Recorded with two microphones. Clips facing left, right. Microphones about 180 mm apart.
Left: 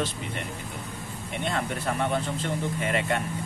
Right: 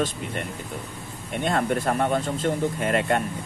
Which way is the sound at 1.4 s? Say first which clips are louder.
Right 6 dB; 45° right (ahead or behind).